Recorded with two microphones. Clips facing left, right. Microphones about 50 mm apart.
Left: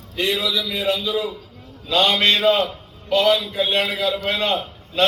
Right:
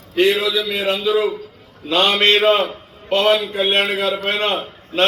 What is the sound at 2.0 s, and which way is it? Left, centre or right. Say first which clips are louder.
Speech: right 3 dB; right.